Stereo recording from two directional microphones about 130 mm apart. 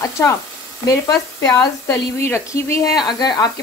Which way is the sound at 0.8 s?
25° left (ahead or behind).